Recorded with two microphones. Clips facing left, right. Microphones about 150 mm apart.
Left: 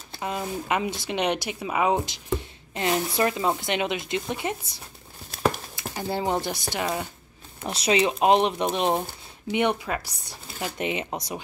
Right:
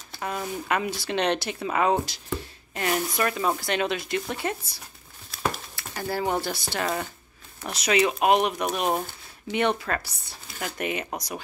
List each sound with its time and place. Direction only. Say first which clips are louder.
0.2 s speech: left 1 dB; 20° left (ahead or behind)
5.9 s speech: even; 20° left (ahead or behind)
7.6 s speech: left 1 dB; 30° left (ahead or behind)